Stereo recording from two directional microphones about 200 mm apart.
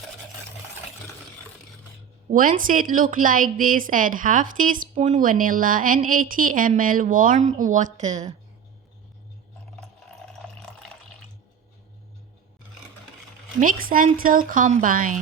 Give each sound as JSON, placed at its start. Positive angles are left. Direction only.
{"t": 2.3, "sound": "a woman's voice", "side_deg": -45}
{"t": 13.6, "sound": "a woman's voice", "side_deg": -45}